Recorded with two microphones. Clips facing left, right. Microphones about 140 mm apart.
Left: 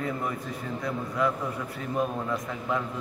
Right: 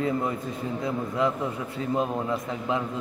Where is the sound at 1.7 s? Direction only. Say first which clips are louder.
Right 3 dB; 25° right (ahead or behind).